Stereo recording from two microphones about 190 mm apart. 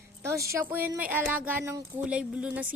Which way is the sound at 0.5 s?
15° right (ahead or behind).